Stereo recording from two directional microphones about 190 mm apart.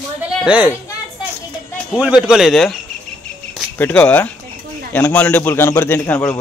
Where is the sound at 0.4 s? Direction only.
5° right (ahead or behind).